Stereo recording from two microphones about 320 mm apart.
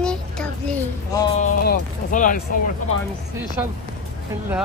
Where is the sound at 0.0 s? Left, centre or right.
Centre.